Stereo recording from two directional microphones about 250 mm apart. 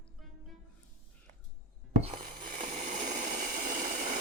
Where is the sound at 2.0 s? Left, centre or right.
Right.